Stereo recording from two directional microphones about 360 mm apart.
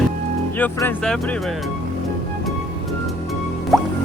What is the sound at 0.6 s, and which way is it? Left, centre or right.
Speech, centre.